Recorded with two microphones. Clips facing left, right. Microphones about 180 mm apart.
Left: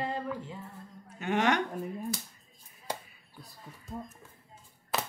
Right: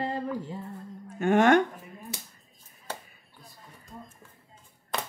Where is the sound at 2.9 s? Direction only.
10° left (ahead or behind).